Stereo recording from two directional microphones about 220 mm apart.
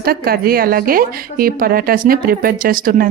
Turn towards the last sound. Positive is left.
turn(degrees=-40)  # may be behind; listen again after turning